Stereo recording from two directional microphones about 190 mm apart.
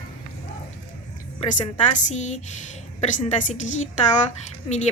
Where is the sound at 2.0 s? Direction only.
40° left (ahead or behind).